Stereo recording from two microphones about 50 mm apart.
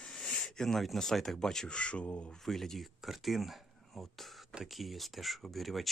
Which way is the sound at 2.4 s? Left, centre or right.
Centre.